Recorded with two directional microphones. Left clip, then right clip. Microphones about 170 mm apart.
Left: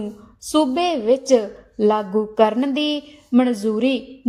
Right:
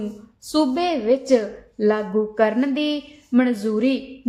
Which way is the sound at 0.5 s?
25° left (ahead or behind).